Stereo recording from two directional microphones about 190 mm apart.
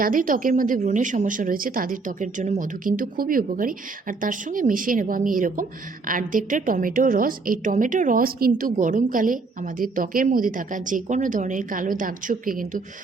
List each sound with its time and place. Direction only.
0.0 s speech: 45° right (ahead or behind)